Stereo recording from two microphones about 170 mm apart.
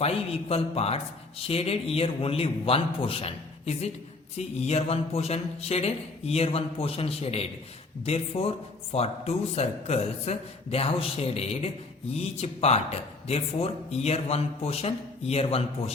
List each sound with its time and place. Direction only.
0.0 s speech: 35° left (ahead or behind)